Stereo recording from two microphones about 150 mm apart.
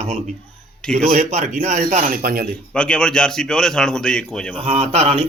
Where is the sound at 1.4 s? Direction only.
60° right (ahead or behind); by 2.4 s 75° right (ahead or behind).